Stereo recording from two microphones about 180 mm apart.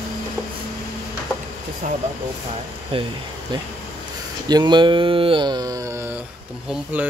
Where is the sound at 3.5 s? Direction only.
25° right (ahead or behind).